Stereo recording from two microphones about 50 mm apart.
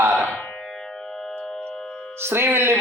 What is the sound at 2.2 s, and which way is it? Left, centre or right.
Speech, right.